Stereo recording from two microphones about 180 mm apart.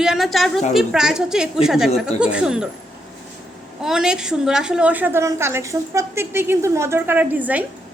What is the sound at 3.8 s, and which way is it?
A woman's voice, 5° right (ahead or behind).